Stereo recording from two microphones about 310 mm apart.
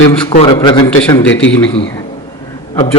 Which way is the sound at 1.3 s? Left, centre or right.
Left.